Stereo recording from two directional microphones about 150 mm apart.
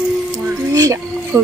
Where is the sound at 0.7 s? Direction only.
20° right (ahead or behind).